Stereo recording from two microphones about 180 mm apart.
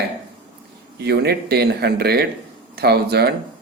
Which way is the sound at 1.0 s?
65° right (ahead or behind).